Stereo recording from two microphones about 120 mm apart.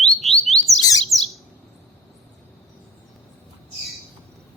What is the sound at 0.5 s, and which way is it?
Bird, 60° left (ahead or behind).